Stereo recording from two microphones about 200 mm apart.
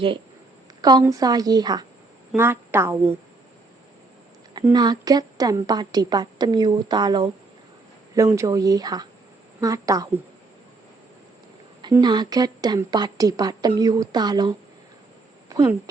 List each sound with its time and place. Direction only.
0.8 s a woman's voice: 20° right (ahead or behind)
4.6 s a woman's voice: 20° right (ahead or behind)
11.8 s a woman's voice: 20° right (ahead or behind)
15.4 s a sound: 15° right (ahead or behind)